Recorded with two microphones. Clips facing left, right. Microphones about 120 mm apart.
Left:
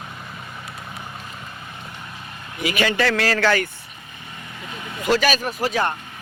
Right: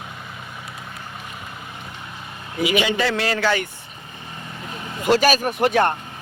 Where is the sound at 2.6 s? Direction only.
15° right (ahead or behind).